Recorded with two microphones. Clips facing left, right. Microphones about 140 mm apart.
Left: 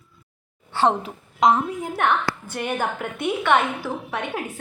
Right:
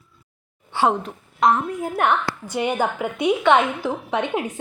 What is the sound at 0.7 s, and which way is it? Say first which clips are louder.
Speech: even; 15° right (ahead or behind).